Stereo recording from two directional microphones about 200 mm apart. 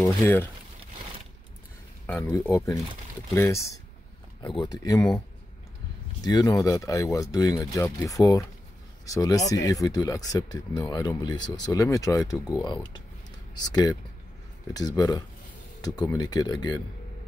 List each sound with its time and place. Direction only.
0.0 s speech: 10° left (ahead or behind)
2.0 s speech: 10° left (ahead or behind)
6.2 s speech: 20° left (ahead or behind)